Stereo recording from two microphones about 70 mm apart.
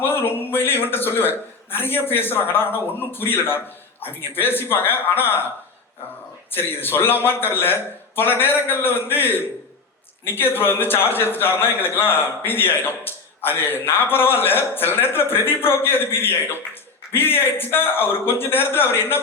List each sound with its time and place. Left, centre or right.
0.0 s a man's voice: left
6.5 s a man's voice: left